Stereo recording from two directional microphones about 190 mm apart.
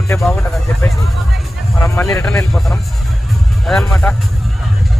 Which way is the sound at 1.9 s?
15° left (ahead or behind).